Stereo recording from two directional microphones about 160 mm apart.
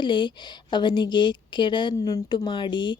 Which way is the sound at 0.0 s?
30° left (ahead or behind).